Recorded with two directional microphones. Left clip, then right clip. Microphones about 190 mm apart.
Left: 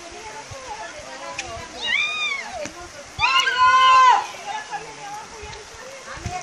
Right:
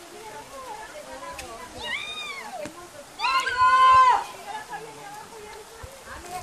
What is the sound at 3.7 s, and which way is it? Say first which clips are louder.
Livestock: left 2 dB; 40° left (ahead or behind).